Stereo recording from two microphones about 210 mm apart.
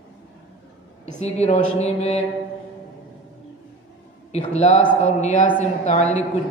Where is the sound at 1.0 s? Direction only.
30° left (ahead or behind).